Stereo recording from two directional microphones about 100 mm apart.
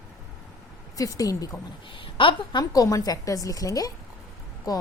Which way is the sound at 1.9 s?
60° left (ahead or behind).